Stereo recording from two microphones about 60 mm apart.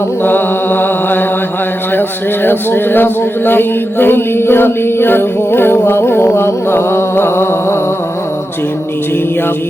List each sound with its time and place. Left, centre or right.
0.2 s mantra: left
2.0 s a man's voice: left